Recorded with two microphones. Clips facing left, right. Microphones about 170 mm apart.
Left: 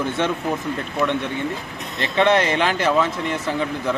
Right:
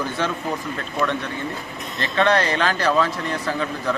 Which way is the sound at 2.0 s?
20° left (ahead or behind).